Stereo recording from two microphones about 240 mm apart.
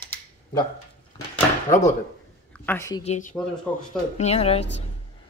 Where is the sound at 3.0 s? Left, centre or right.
Left.